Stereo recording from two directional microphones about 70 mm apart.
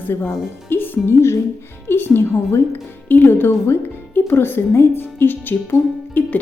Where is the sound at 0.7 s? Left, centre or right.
Left.